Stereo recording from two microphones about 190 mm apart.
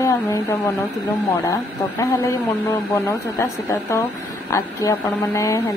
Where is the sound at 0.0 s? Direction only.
15° left (ahead or behind).